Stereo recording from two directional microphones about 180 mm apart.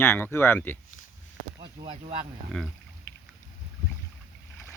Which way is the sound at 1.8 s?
25° right (ahead or behind).